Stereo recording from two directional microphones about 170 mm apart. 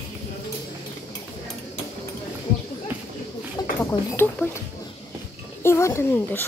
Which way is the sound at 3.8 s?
15° left (ahead or behind).